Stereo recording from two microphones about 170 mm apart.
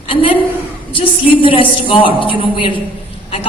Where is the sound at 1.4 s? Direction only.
30° left (ahead or behind).